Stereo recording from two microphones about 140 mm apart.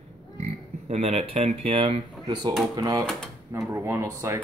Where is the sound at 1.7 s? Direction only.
40° right (ahead or behind).